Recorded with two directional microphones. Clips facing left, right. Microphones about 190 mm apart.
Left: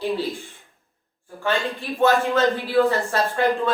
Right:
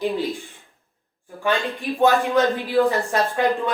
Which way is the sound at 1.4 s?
15° right (ahead or behind).